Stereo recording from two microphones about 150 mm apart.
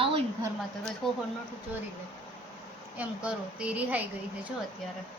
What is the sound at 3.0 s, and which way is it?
Speech, 10° right (ahead or behind).